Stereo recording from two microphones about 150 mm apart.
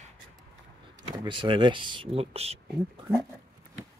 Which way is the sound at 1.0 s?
30° right (ahead or behind).